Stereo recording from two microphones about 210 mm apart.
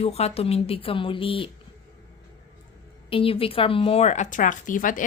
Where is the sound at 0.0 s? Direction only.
30° left (ahead or behind).